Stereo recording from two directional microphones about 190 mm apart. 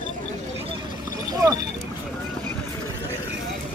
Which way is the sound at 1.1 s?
20° right (ahead or behind).